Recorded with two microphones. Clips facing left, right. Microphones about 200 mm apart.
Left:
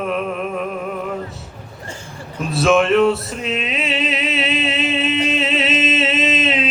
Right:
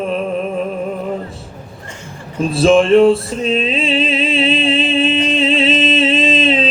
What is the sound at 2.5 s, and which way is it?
Male singing, 30° right (ahead or behind).